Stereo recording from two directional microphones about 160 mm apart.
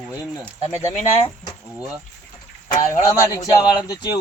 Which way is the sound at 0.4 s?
15° left (ahead or behind).